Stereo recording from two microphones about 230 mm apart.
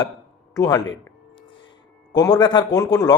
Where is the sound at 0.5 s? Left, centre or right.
Centre.